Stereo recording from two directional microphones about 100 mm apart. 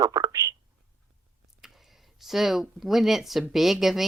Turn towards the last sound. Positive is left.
turn(degrees=0)  # may be behind; listen again after turning